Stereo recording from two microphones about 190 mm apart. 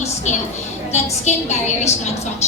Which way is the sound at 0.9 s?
35° left (ahead or behind).